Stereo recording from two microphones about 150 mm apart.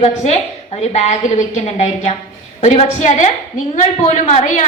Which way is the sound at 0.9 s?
50° left (ahead or behind).